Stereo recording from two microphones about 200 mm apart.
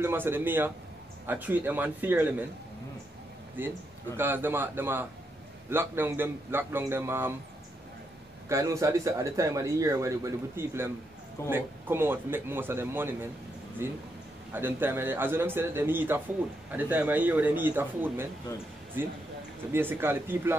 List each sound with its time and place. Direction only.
0.0 s speech: 10° right (ahead or behind)
3.6 s speech: 10° right (ahead or behind)
8.5 s speech: 15° right (ahead or behind)
19.7 s speech: 10° right (ahead or behind)